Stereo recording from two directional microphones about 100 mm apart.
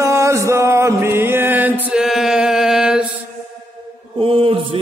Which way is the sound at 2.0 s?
5° right (ahead or behind).